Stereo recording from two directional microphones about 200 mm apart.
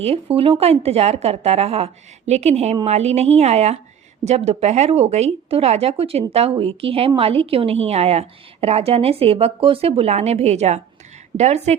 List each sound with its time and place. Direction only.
0.3 s a woman's voice: 30° right (ahead or behind)